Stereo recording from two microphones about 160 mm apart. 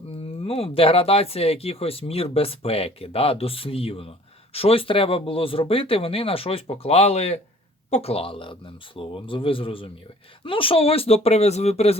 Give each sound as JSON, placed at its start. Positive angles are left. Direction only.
{"t": 0.4, "sound": "speech", "side_deg": 35}